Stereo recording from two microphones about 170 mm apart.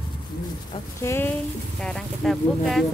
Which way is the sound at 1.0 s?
15° left (ahead or behind).